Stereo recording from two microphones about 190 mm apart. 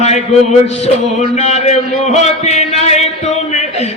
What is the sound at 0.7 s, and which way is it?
Music, 35° left (ahead or behind).